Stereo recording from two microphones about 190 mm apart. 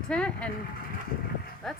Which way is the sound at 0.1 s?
5° left (ahead or behind).